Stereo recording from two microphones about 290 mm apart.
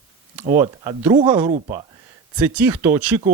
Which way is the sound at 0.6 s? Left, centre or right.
Centre.